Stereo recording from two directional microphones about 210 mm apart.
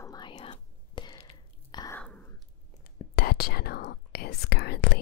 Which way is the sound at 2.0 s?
5° left (ahead or behind).